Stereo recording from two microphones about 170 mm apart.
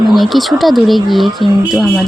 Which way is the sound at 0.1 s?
Centre (ahead or behind).